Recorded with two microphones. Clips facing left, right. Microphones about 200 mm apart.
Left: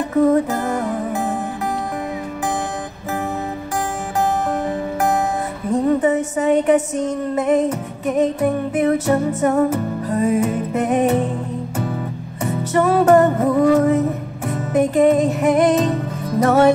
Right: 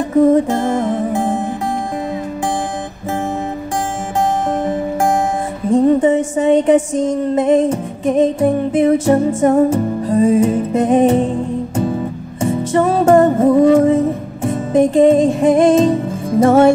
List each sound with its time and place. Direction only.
0.3 s music: 30° right (ahead or behind)
4.5 s music: 25° right (ahead or behind)